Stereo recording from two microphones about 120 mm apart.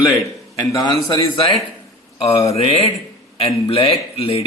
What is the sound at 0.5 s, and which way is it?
A man's voice, 30° left (ahead or behind).